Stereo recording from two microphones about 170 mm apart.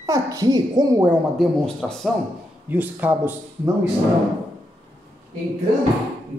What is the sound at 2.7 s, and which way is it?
Speech, 10° right (ahead or behind).